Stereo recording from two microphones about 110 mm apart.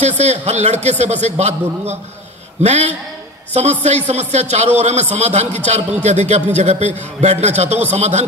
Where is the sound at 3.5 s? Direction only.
85° right.